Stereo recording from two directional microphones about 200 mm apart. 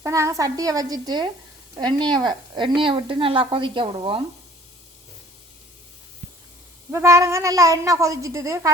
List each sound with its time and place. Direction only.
0.0 s a woman's voice: 15° right (ahead or behind)
6.9 s speech: 15° right (ahead or behind)